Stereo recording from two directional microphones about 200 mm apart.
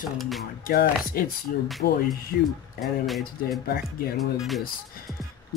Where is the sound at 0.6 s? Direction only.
45° left (ahead or behind).